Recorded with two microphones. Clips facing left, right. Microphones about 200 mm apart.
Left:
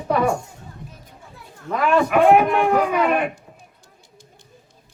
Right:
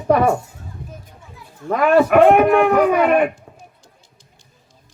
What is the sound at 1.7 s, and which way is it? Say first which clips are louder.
A man's voice: right 5 dB; 50° right (ahead or behind).